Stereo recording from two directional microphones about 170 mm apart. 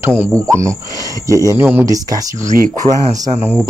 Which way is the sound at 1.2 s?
20° right (ahead or behind).